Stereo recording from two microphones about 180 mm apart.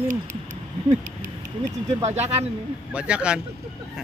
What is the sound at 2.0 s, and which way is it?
Speech, 35° right (ahead or behind).